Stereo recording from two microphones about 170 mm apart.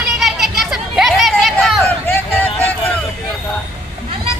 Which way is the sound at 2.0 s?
10° left (ahead or behind).